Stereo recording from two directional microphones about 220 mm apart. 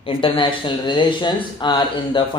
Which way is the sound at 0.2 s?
25° left (ahead or behind).